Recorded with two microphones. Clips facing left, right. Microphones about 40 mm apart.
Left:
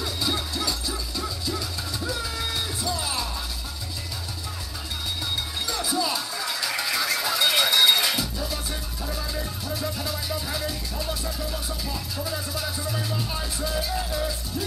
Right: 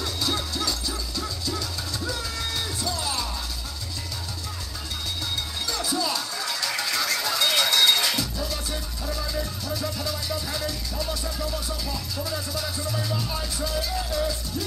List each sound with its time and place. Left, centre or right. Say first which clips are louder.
0.0 s music: even; centre
5.7 s music: even; centre